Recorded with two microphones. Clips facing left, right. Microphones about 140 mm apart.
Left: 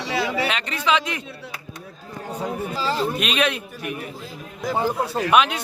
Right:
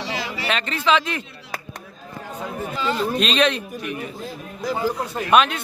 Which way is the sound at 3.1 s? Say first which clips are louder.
Right 3 dB; 10° left (ahead or behind).